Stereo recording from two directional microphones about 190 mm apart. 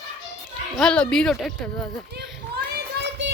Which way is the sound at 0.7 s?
5° left (ahead or behind).